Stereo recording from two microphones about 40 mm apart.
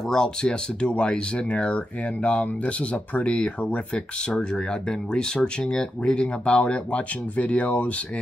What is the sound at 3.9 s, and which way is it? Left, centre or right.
Speech, left.